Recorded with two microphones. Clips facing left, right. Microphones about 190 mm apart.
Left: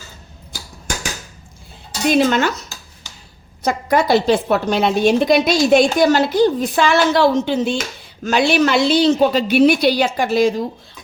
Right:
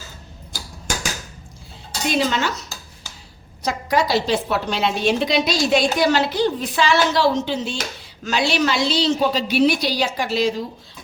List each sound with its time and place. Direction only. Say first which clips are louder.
2.0 s a woman's voice: left 6 dB; 55° left (ahead or behind)
3.6 s a woman's voice: left 4 dB; 50° left (ahead or behind)